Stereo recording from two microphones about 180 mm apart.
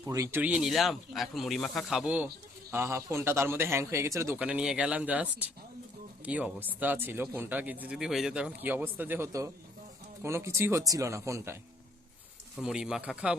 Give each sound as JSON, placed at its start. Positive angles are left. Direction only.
{"t": 0.0, "sound": "speech", "side_deg": -15}
{"t": 12.5, "sound": "speech", "side_deg": -5}